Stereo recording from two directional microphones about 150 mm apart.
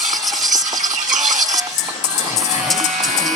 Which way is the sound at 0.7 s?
55° right (ahead or behind).